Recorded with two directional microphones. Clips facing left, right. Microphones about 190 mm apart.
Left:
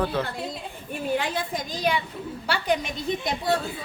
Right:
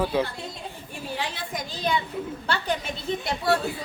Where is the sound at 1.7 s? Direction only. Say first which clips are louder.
Even; 10° left (ahead or behind).